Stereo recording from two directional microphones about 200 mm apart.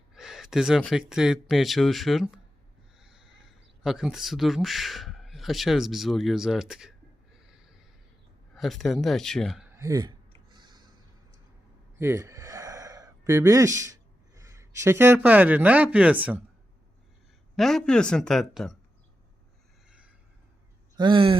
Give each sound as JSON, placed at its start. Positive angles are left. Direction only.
{"t": 0.1, "sound": "speech", "side_deg": 0}
{"t": 7.4, "sound": "snort", "side_deg": -5}
{"t": 8.5, "sound": "a man's voice", "side_deg": 0}
{"t": 9.7, "sound": "a sound", "side_deg": -15}
{"t": 11.9, "sound": "gasp", "side_deg": -15}
{"t": 13.7, "sound": "speech", "side_deg": -15}
{"t": 17.6, "sound": "a man's voice", "side_deg": 0}
{"t": 20.9, "sound": "speech", "side_deg": -25}